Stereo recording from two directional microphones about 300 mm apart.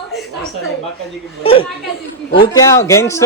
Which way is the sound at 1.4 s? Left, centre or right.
Centre.